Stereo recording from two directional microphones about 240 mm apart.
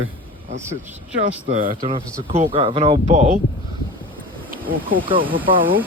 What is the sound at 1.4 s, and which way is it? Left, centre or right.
Speech, right.